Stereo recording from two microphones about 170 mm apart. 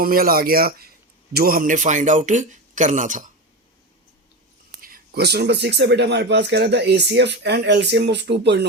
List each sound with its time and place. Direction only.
0.0 s speech: 60° right (ahead or behind)
4.8 s speech: 65° right (ahead or behind); by 8.6 s 85° right